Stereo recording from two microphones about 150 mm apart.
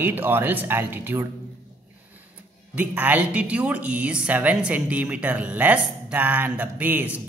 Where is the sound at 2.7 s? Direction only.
10° right (ahead or behind).